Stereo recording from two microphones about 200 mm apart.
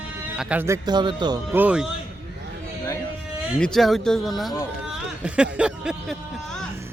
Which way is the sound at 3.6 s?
Centre (ahead or behind).